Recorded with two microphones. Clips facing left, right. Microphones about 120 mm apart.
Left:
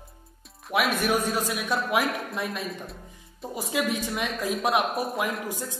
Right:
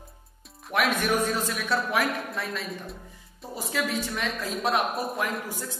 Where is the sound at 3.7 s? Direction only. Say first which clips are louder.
Left 2 dB; 15° left (ahead or behind).